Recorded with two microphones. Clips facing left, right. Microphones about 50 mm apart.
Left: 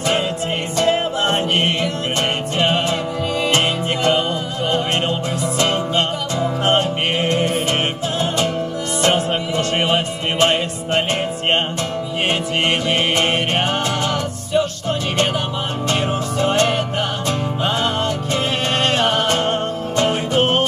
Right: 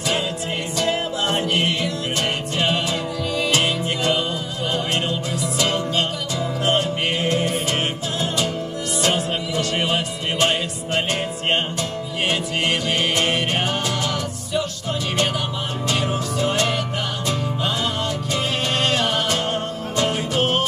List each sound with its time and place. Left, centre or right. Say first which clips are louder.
0.7 s music: left 5 dB; left
9.0 s music: left 5 dB; left
16.3 s music: left 5 dB; left